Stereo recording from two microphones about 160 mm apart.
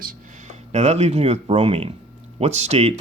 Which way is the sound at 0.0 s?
55° right (ahead or behind).